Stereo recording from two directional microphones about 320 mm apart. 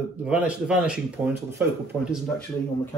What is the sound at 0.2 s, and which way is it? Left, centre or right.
Speech, centre.